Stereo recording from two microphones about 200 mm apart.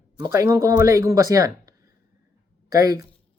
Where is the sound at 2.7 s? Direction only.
15° right (ahead or behind).